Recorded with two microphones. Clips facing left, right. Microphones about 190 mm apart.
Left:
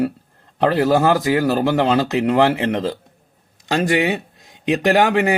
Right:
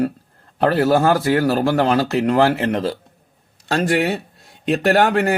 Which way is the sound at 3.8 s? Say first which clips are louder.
Even; 15° left (ahead or behind).